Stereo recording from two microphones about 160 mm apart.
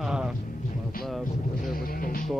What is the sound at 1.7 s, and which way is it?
Music, 60° left (ahead or behind).